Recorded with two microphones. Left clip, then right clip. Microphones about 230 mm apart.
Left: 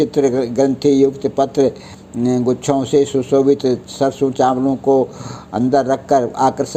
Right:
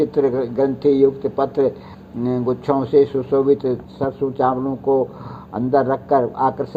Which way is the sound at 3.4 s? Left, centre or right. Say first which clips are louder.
Left 3 dB; left.